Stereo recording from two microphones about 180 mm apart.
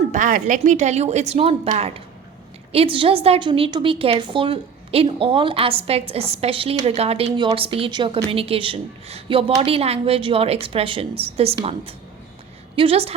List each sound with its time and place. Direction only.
0.1 s a woman's voice: 45° right (ahead or behind)